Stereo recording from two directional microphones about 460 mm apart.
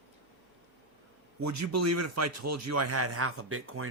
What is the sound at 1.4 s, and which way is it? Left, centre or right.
Speech, right.